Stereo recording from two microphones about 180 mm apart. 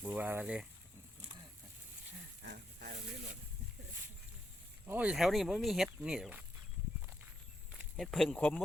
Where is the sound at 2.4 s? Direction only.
65° right (ahead or behind).